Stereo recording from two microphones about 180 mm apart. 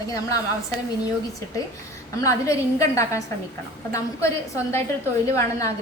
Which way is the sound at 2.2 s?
15° left (ahead or behind).